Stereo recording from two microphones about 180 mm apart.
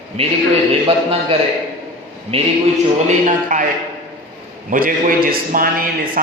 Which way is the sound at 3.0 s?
45° right (ahead or behind).